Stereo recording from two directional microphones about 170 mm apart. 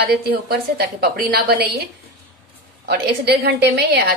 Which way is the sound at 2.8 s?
70° right (ahead or behind).